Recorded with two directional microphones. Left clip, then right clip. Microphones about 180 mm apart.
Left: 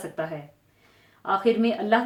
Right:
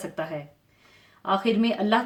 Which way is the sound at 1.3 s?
45° right (ahead or behind).